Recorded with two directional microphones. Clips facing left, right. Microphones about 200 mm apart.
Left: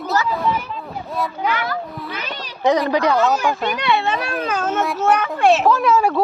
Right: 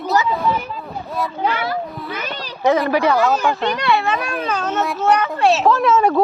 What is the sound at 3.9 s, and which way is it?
Speech, 25° left (ahead or behind).